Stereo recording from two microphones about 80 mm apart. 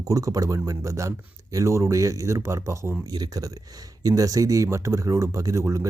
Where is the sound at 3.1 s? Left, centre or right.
Right.